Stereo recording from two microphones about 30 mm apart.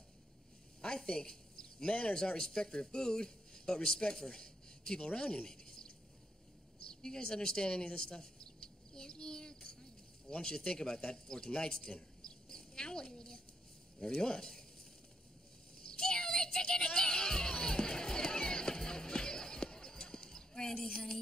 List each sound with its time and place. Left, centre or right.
0.8 s speech: left
2.1 s speech: left
6.9 s a sound: left
10.7 s speech: left
12.3 s cricket: left
13.1 s a sound: left
13.9 s speech: left
15.9 s music: left